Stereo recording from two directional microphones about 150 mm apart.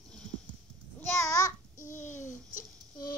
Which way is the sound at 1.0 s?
20° left (ahead or behind).